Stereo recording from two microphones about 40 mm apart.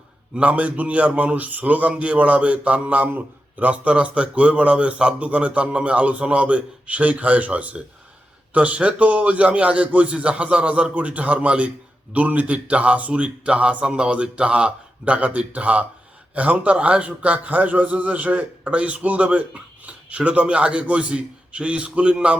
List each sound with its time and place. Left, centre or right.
0.3 s a man's voice: right